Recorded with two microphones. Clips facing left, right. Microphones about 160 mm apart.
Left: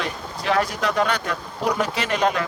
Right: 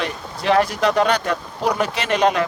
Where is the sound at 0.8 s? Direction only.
75° right (ahead or behind).